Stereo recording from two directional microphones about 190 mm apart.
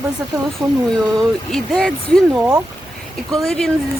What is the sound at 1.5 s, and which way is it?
Speech, centre (ahead or behind).